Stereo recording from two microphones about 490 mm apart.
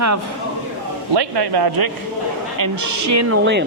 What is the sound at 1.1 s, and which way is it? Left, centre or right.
Speech, right.